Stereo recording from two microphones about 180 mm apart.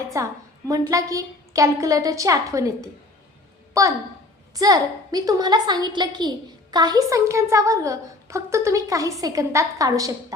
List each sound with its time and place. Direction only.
0.1 s a woman's voice: 15° right (ahead or behind)